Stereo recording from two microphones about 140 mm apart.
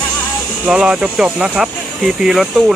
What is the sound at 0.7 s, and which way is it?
Speech, 5° right (ahead or behind).